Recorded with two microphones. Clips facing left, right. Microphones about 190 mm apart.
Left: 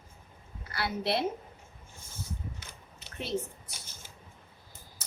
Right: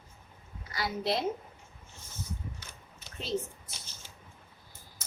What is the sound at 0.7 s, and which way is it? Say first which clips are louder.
Speech: left 1 dB; 65° left (ahead or behind).